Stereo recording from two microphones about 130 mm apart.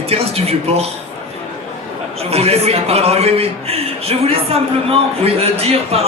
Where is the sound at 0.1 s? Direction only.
50° right (ahead or behind).